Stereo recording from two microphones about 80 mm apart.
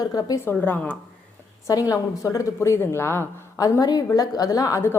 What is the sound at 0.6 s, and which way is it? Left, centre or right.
Speech, left.